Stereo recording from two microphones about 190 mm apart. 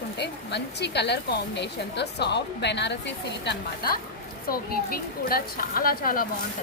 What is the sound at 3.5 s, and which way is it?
Speech, 55° left (ahead or behind).